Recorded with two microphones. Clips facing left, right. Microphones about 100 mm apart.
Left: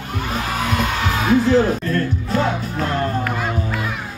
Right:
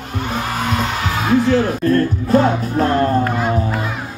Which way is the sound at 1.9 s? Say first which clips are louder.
Right 7 dB; 40° right (ahead or behind).